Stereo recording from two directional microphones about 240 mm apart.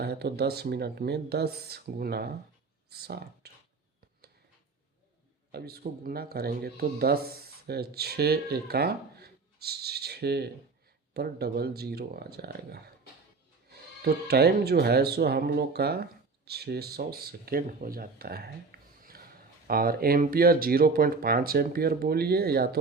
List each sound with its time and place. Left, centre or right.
0.0 s speech: right
5.5 s speech: right